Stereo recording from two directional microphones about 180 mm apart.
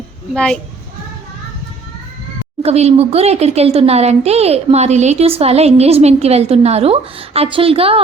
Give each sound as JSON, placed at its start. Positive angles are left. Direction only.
{"t": 0.3, "sound": "a child's voice", "side_deg": 5}
{"t": 2.6, "sound": "speech", "side_deg": -35}